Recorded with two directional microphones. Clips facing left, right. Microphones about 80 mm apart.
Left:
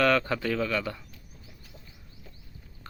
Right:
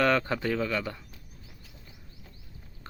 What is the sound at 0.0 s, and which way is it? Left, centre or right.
Speech, right.